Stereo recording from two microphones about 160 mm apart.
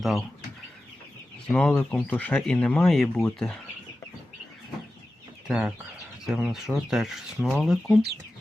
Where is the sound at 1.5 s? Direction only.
5° left (ahead or behind).